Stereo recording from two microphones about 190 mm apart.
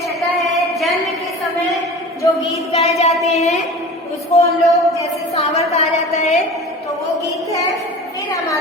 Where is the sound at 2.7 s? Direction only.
35° left (ahead or behind).